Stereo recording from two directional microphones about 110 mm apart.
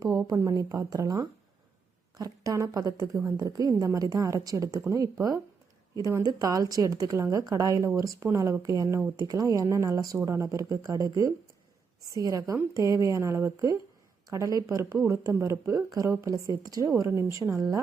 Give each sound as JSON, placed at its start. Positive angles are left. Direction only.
{"t": 0.3, "sound": "a woman's voice", "side_deg": -30}